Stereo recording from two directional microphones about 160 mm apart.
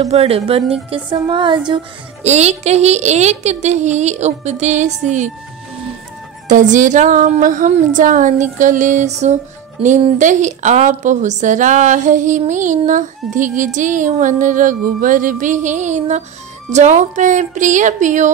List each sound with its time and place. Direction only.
0.0 s a woman's voice: 40° right (ahead or behind)
2.2 s a woman's voice: 45° right (ahead or behind)
6.5 s a woman's voice: 50° right (ahead or behind)